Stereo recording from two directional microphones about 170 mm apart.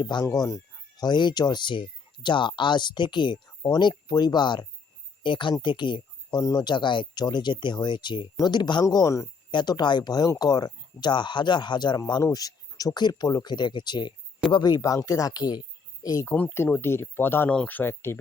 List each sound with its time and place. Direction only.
0.0 s speech: 25° left (ahead or behind)